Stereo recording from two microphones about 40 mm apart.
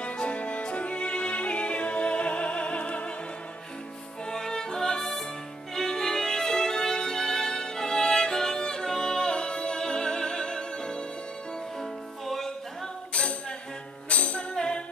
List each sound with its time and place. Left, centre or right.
0.0 s music: left
4.3 s music: centre
11.8 s music: centre
14.0 s music: left
14.5 s music: centre